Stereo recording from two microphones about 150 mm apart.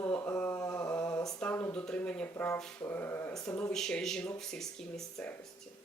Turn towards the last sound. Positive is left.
turn(degrees=5)  # may be behind; listen again after turning